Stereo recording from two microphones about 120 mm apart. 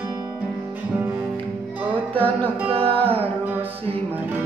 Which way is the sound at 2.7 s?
50° right (ahead or behind).